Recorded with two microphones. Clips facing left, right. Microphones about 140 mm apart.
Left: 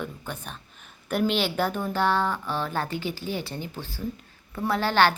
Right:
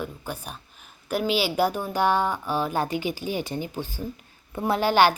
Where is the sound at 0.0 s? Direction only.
10° right (ahead or behind).